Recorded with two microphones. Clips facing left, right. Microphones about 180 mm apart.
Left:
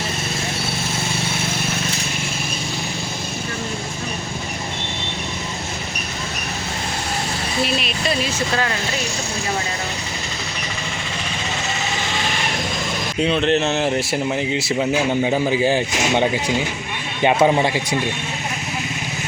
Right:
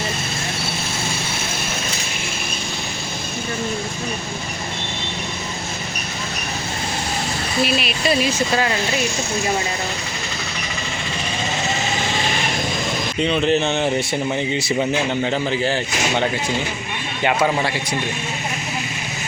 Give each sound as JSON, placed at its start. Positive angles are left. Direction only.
{"t": 7.6, "sound": "speech", "side_deg": -5}
{"t": 13.2, "sound": "speech", "side_deg": 0}